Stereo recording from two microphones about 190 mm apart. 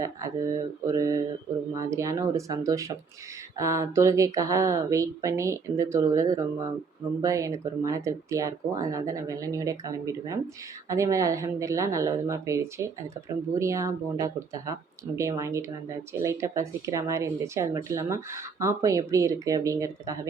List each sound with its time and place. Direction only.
0.0 s a woman's voice: 15° right (ahead or behind)